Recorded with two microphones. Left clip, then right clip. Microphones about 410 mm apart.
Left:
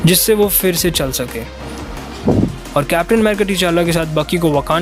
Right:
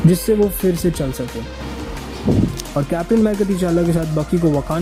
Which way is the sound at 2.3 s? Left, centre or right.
Left.